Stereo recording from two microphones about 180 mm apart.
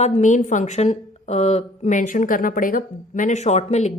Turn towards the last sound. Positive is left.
turn(degrees=40)  # may be behind; listen again after turning